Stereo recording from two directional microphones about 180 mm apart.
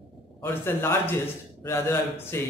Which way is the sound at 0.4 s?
10° left (ahead or behind).